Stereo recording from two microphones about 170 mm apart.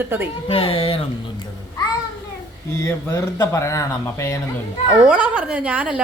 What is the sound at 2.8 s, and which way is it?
Speech, 20° left (ahead or behind).